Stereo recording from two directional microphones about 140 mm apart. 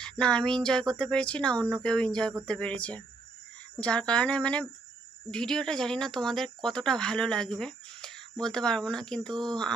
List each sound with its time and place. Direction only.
0.0 s speech: 5° left (ahead or behind)